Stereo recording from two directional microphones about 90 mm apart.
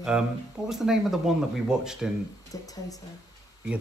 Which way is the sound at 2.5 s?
40° left (ahead or behind).